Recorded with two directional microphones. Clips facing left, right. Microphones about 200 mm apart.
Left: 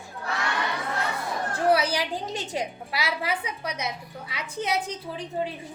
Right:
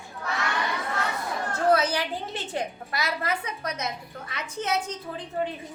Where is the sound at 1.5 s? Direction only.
10° left (ahead or behind).